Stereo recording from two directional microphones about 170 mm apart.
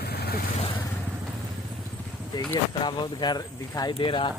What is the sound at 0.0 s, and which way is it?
Vehicle, 70° left (ahead or behind).